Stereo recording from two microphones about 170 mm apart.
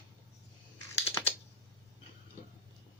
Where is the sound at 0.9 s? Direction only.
15° left (ahead or behind).